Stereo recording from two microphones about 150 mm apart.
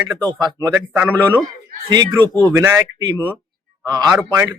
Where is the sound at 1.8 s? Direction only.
25° right (ahead or behind).